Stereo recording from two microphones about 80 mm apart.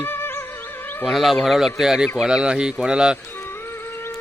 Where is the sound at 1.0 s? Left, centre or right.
Centre.